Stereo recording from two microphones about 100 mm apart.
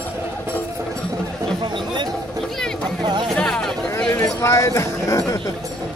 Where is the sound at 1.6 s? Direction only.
50° right (ahead or behind).